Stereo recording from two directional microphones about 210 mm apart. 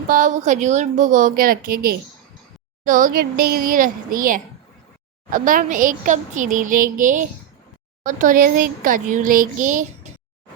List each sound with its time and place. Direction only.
0.1 s a child's voice: 35° right (ahead or behind)